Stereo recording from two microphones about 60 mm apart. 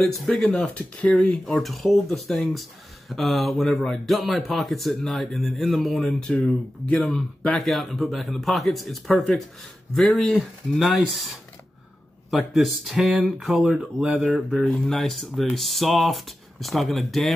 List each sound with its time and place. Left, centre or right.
0.0 s speech: centre
0.7 s speech: left
1.4 s speech: centre
6.3 s speech: left
7.0 s speech: centre
14.7 s speech: centre